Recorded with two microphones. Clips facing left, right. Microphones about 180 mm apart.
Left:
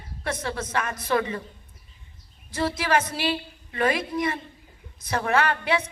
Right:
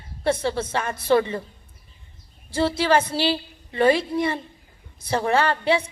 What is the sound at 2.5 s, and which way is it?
A woman's voice, 30° right (ahead or behind).